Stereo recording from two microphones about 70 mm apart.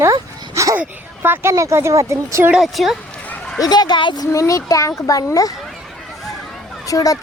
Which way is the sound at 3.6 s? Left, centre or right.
Left.